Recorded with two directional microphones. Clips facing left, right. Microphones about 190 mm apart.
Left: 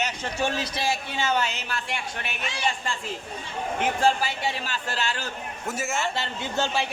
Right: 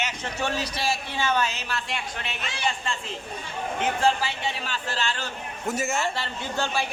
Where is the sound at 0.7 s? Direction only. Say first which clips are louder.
Left 1 dB; 30° left (ahead or behind).